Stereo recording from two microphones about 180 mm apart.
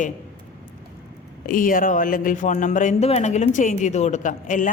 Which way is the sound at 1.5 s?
50° left (ahead or behind).